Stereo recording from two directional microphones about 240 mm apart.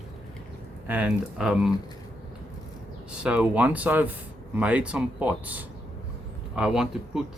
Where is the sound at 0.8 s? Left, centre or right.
Centre.